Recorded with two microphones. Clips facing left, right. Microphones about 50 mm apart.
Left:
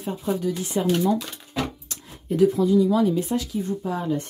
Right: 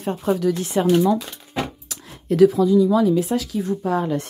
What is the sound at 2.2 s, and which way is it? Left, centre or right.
Speech, right.